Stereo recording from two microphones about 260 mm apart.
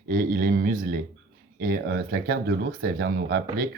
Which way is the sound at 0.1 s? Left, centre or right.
Right.